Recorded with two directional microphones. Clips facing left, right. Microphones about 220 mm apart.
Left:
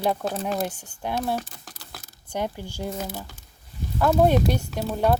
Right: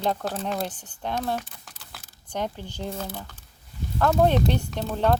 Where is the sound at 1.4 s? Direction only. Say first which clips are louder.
Left 4 dB; 40° left (ahead or behind).